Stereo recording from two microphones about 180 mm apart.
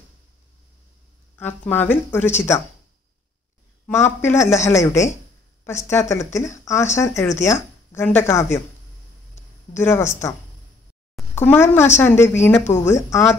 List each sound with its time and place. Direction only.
1.4 s speech: 10° left (ahead or behind)
3.9 s speech: 15° left (ahead or behind)
11.3 s speech: 15° left (ahead or behind)